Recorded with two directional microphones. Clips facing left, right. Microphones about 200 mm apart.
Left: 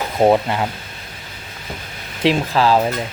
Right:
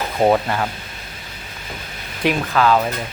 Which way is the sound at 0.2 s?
15° left (ahead or behind).